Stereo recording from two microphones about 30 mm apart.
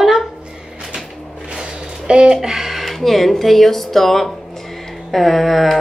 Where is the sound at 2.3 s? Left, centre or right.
Centre.